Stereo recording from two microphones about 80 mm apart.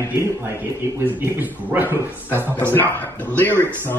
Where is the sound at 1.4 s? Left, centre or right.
Right.